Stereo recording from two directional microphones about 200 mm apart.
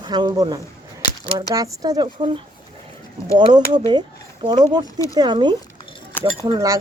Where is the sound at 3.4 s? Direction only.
20° right (ahead or behind).